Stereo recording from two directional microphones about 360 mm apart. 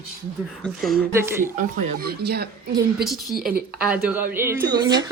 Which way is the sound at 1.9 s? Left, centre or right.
Right.